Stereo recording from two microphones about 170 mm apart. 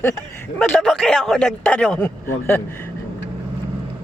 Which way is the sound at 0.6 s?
5° left (ahead or behind).